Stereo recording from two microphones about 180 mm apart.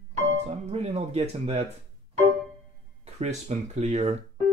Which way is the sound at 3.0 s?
40° right (ahead or behind).